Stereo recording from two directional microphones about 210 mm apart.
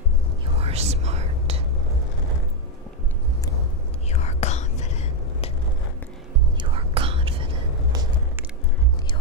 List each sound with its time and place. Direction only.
0.6 s whispering: 30° right (ahead or behind)
4.1 s whispering: 30° left (ahead or behind)
6.6 s whispering: 25° right (ahead or behind)